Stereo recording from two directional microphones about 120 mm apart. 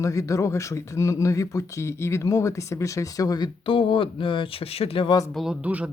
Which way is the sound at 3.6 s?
45° left (ahead or behind).